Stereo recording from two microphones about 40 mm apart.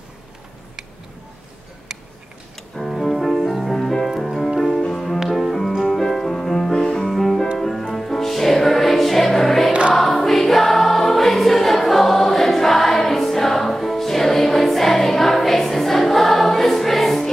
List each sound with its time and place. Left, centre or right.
2.8 s music: centre
7.1 s music: centre
9.7 s choir: right
9.9 s choir: centre